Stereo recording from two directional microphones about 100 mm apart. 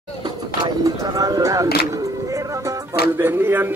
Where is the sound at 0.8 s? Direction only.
40° right (ahead or behind).